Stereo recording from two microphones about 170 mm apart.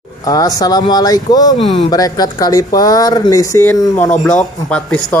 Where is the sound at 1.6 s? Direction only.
35° left (ahead or behind).